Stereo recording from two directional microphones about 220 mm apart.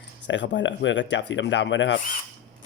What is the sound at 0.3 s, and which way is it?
Speech, 55° left (ahead or behind).